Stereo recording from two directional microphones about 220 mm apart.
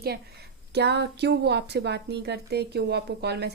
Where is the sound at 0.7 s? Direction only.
50° right (ahead or behind).